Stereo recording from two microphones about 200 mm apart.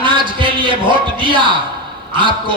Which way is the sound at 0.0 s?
25° right (ahead or behind).